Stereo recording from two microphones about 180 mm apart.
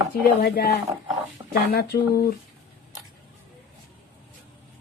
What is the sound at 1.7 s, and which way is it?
Speech, 55° left (ahead or behind).